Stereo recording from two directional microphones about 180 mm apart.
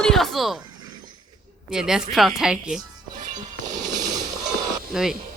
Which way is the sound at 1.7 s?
5° right (ahead or behind).